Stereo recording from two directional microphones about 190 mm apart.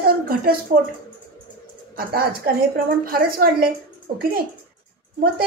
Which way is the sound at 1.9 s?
50° right (ahead or behind).